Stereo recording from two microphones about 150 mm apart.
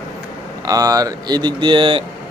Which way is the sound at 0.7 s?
25° right (ahead or behind).